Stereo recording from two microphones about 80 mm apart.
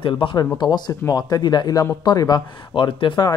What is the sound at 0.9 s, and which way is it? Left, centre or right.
Speech, left.